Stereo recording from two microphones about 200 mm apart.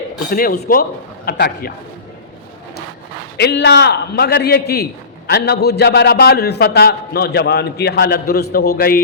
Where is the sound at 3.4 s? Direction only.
55° left (ahead or behind).